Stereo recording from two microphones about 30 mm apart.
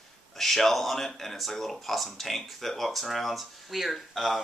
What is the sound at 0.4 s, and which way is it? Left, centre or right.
Speech, centre.